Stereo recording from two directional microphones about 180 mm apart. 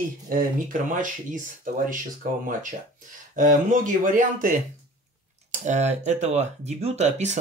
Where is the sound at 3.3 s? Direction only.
45° right (ahead or behind).